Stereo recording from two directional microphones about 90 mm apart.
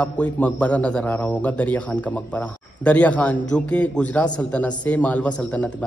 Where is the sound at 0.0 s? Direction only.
15° left (ahead or behind).